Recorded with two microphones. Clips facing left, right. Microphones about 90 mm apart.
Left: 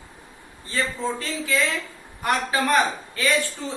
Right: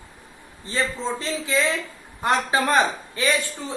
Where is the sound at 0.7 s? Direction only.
20° right (ahead or behind).